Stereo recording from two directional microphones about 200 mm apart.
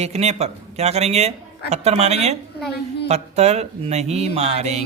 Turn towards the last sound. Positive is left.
turn(degrees=-35)  # may be behind; listen again after turning